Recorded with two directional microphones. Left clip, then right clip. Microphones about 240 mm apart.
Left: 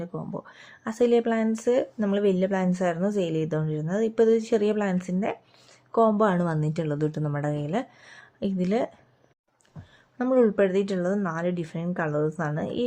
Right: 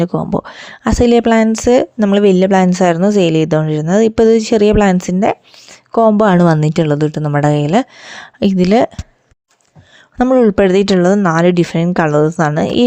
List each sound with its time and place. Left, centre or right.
0.0 s speech: right
10.2 s speech: right